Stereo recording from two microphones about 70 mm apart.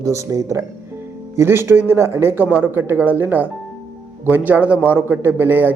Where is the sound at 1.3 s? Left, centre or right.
Right.